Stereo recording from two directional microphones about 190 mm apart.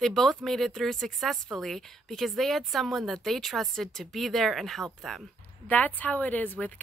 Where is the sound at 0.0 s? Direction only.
Centre (ahead or behind).